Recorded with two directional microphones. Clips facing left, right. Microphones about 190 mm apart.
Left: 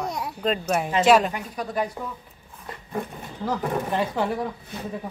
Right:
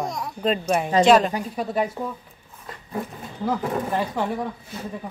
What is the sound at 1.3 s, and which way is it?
Speech, 30° right (ahead or behind).